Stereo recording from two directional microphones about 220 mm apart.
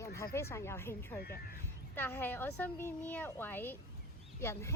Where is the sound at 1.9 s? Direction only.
10° left (ahead or behind).